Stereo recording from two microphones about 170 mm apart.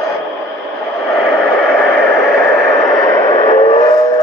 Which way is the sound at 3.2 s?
30° left (ahead or behind).